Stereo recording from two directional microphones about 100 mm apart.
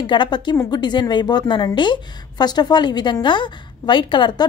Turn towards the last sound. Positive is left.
turn(degrees=50)  # may be behind; listen again after turning